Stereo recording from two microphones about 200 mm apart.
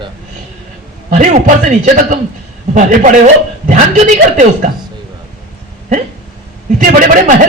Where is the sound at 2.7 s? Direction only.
40° right (ahead or behind).